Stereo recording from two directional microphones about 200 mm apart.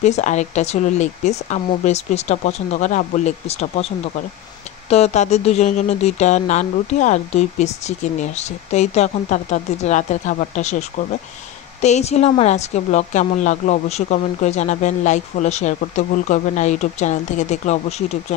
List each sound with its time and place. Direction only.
0.0 s speech: 35° left (ahead or behind)
4.8 s speech: 30° left (ahead or behind)